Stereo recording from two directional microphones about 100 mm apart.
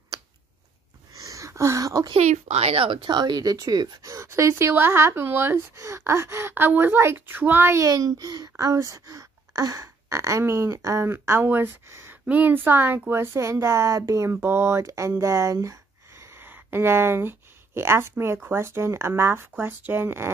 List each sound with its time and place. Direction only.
1.1 s a sound: 35° right (ahead or behind)
2.1 s speech: 90° right; by 7.8 s 20° right (ahead or behind)
7.8 s a child's voice: 35° right (ahead or behind)